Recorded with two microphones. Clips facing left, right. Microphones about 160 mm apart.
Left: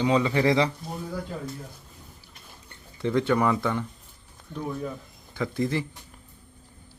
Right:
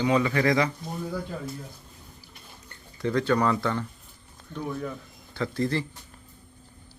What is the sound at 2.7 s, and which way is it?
Speech, 20° left (ahead or behind).